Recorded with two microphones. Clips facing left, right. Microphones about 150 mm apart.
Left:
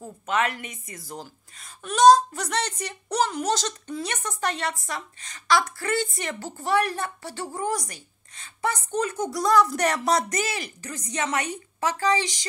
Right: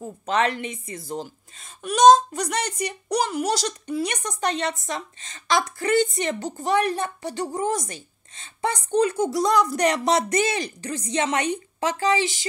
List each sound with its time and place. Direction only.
0.3 s speech: 30° right (ahead or behind)
12.0 s a woman's voice: 10° right (ahead or behind)